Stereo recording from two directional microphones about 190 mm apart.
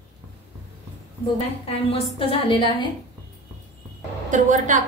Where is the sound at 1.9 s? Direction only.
30° left (ahead or behind).